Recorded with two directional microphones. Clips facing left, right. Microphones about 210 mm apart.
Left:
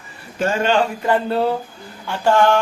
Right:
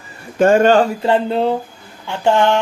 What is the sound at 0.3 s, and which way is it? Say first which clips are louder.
Speech: right 7 dB; 50° right (ahead or behind).